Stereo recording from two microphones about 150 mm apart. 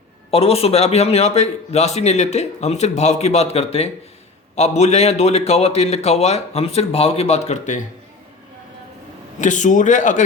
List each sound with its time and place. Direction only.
0.3 s a man's voice: 40° left (ahead or behind)
9.4 s a man's voice: 55° left (ahead or behind)